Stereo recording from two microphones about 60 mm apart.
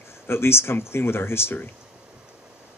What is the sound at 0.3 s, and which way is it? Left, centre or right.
Speech, left.